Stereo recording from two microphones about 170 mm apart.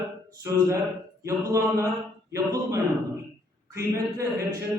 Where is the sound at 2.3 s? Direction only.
20° right (ahead or behind).